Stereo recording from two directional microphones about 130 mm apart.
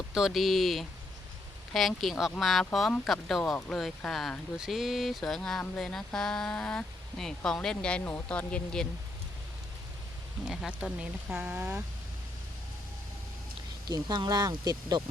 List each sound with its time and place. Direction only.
0.1 s speech: 5° right (ahead or behind)
10.4 s speech: 5° right (ahead or behind)
11.3 s speech: 15° right (ahead or behind)
13.8 s speech: 35° right (ahead or behind)